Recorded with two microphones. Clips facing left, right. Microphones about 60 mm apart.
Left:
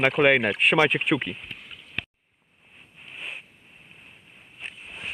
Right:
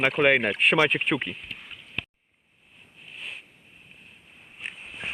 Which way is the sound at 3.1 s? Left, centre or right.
Left.